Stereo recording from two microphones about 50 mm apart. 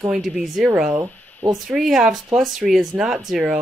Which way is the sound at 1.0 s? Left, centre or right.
Right.